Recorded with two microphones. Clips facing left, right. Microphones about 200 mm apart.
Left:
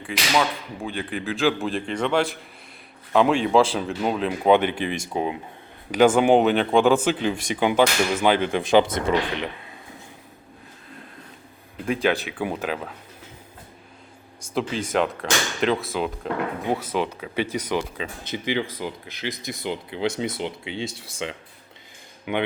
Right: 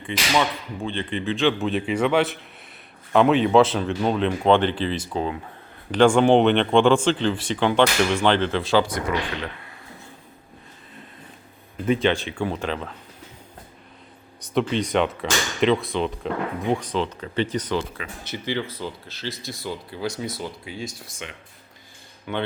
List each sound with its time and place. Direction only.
0.0 s speech: centre (ahead or behind); by 9.7 s 20° left (ahead or behind)
11.9 s speech: 5° left (ahead or behind)
14.5 s speech: centre (ahead or behind); by 21.2 s 30° left (ahead or behind)
22.3 s speech: 15° left (ahead or behind)